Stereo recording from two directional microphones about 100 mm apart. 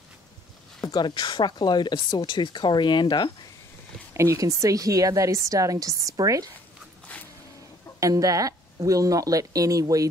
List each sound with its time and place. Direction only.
0.9 s speech: 50° left (ahead or behind)
4.1 s a woman's voice: 30° right (ahead or behind)
8.0 s a woman's voice: 35° right (ahead or behind)